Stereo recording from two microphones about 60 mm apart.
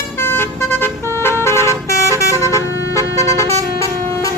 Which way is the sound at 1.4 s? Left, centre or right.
Left.